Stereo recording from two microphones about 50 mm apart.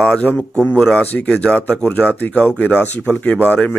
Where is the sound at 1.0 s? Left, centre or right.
Left.